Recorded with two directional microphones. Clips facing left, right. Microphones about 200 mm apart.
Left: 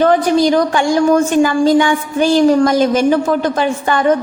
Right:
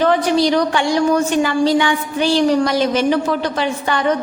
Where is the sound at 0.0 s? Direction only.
45° left (ahead or behind).